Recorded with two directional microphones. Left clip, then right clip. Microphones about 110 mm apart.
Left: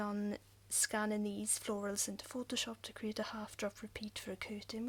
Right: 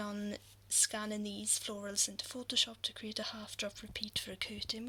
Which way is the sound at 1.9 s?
65° left (ahead or behind).